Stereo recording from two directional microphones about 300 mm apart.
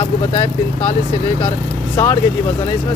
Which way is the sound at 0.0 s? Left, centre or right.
Left.